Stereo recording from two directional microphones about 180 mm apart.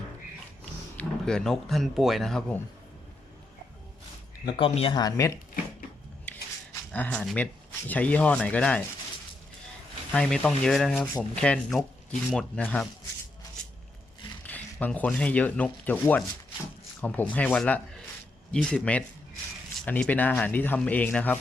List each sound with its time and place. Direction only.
0.9 s speech: 5° left (ahead or behind)
4.4 s speech: 30° left (ahead or behind)
6.9 s speech: 5° left (ahead or behind)
10.1 s speech: 5° left (ahead or behind)
14.4 s speech: 10° left (ahead or behind)